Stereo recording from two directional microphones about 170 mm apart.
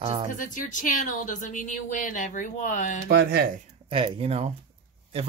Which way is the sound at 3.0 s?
60° right (ahead or behind).